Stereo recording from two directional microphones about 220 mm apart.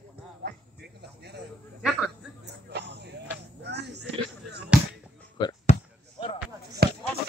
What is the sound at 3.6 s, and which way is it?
Music, 50° right (ahead or behind).